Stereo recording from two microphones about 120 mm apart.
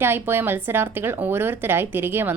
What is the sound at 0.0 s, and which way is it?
A woman's voice, 20° right (ahead or behind).